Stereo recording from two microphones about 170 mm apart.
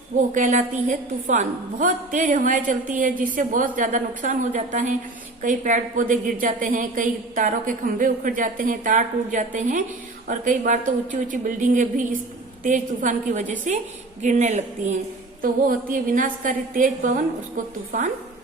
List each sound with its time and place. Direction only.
0.3 s a woman's voice: 50° right (ahead or behind)